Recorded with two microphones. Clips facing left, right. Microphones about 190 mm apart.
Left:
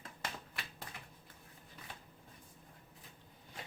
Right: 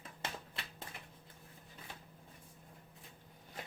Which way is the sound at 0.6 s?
25° right (ahead or behind).